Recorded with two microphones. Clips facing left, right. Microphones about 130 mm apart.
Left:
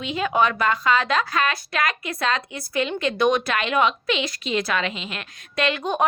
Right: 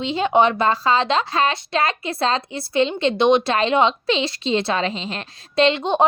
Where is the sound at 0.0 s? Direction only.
30° right (ahead or behind).